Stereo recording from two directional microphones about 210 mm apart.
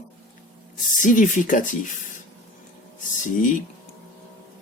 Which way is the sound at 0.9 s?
40° left (ahead or behind).